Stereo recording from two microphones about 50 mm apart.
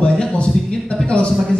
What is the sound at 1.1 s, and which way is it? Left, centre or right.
Speech, centre.